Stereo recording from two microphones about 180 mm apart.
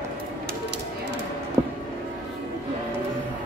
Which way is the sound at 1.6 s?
20° right (ahead or behind).